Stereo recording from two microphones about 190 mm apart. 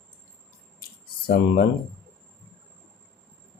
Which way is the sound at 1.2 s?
55° left (ahead or behind).